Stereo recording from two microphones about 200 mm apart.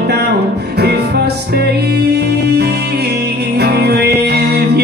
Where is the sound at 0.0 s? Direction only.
55° right (ahead or behind).